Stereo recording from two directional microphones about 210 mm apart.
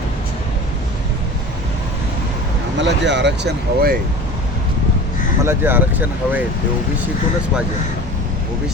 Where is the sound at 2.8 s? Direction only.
55° right (ahead or behind).